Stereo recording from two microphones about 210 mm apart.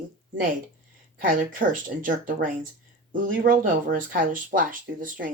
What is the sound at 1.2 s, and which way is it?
Speech, 40° right (ahead or behind).